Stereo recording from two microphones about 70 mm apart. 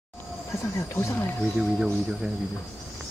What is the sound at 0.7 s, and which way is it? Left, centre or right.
Speech, left.